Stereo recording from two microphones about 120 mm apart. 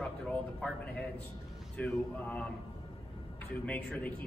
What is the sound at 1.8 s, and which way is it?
Speech, 10° left (ahead or behind).